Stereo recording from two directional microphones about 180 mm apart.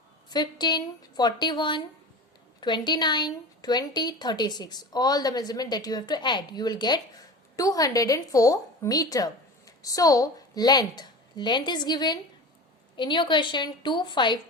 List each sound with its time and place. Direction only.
0.3 s a woman's voice: 25° left (ahead or behind)